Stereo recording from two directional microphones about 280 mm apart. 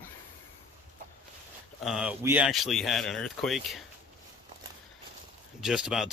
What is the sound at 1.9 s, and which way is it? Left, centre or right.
Speech, centre.